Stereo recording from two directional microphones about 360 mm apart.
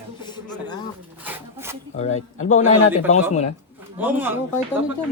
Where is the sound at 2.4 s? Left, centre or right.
Centre.